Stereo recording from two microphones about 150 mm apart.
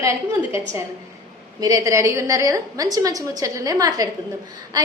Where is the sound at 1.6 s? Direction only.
20° right (ahead or behind).